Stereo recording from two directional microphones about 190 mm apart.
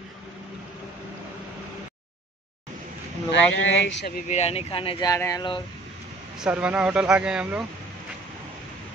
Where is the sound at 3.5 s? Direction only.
85° left; by 4.2 s 60° left (ahead or behind).